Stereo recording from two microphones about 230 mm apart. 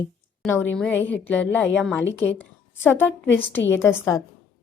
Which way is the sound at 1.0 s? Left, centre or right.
Left.